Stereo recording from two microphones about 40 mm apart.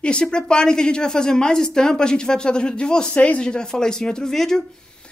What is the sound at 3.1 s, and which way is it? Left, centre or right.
Speech, left.